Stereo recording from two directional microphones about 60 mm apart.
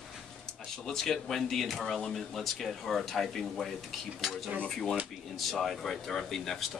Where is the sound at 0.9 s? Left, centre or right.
Centre.